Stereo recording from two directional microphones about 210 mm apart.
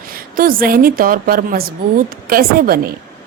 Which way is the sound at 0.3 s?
45° right (ahead or behind).